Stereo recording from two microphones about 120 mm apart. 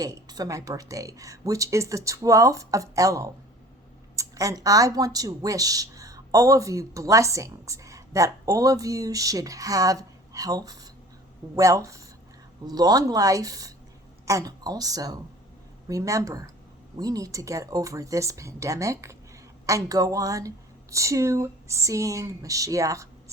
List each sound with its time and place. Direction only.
0.0 s speech: 30° right (ahead or behind)